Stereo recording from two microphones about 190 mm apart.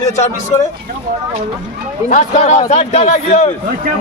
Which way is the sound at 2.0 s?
40° left (ahead or behind).